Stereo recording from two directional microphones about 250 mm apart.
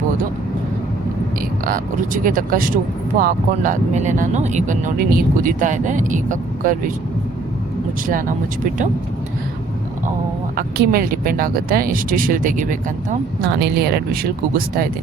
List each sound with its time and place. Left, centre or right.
1.6 s speech: right
10.6 s speech: right